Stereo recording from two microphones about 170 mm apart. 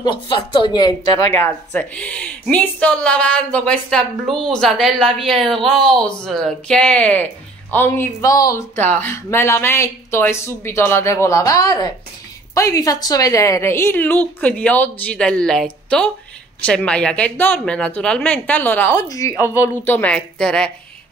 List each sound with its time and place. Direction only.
0.0 s a woman's voice: 25° left (ahead or behind); by 20.7 s 5° left (ahead or behind)